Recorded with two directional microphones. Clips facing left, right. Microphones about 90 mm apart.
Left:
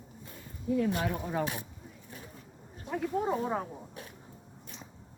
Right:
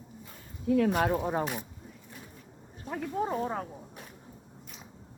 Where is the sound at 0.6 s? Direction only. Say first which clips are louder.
Right 4 dB; 85° right.